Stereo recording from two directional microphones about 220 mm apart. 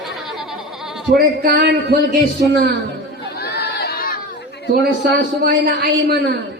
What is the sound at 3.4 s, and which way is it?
Crowd, 45° left (ahead or behind).